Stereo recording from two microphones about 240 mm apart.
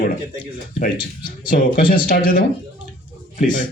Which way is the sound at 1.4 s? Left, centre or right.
Left.